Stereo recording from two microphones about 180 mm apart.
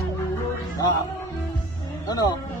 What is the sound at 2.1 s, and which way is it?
Music, 20° left (ahead or behind).